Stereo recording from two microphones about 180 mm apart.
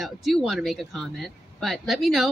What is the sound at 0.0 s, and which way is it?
A woman's voice, centre (ahead or behind).